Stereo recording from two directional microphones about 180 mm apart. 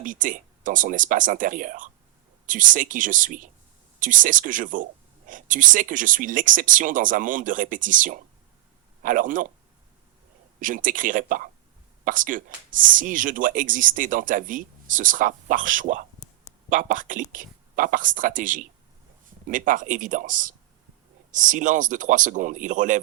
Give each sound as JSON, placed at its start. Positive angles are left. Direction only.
{"t": 0.0, "sound": "speech", "side_deg": -50}
{"t": 10.6, "sound": "speech", "side_deg": -50}